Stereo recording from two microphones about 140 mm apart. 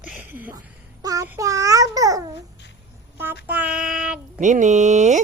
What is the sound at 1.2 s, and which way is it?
Babbling, 20° right (ahead or behind).